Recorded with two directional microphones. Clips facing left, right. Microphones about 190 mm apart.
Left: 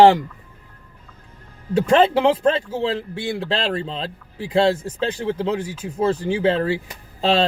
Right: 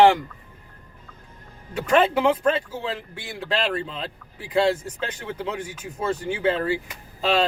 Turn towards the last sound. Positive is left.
turn(degrees=30)  # may be behind; listen again after turning